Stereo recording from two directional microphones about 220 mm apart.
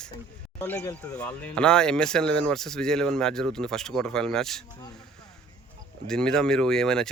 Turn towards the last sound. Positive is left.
turn(degrees=5)  # may be behind; listen again after turning